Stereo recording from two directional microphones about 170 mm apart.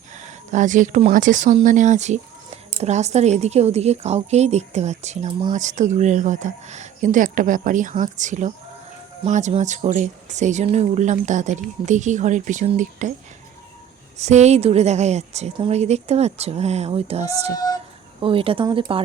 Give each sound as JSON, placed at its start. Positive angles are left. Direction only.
{"t": 0.2, "sound": "a woman's voice", "side_deg": -45}
{"t": 14.2, "sound": "a woman's voice", "side_deg": -40}
{"t": 17.5, "sound": "female singing", "side_deg": 20}
{"t": 18.2, "sound": "a woman's voice", "side_deg": -30}